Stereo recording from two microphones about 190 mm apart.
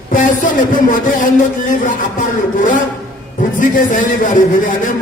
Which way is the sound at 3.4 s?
45° left (ahead or behind).